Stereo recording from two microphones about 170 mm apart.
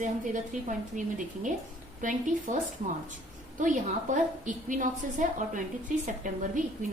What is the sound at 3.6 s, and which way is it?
A woman's voice, 50° right (ahead or behind).